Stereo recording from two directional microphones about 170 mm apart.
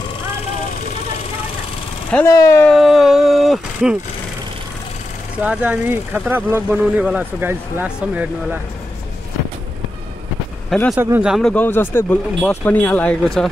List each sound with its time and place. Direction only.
2.0 s speech: 10° left (ahead or behind)
2.7 s vehicle: centre (ahead or behind)
5.4 s speech: 10° right (ahead or behind)
10.7 s speech: centre (ahead or behind)
11.0 s speech: 10° right (ahead or behind)
11.5 s speech: 10° left (ahead or behind)